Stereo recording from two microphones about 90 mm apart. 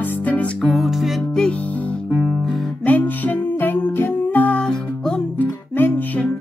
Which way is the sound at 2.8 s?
20° left (ahead or behind).